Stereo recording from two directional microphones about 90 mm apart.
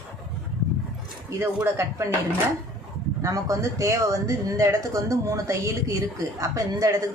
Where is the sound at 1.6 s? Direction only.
30° right (ahead or behind).